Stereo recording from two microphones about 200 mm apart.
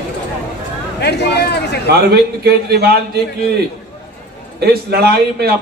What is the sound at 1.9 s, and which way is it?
A man's voice, 55° right (ahead or behind).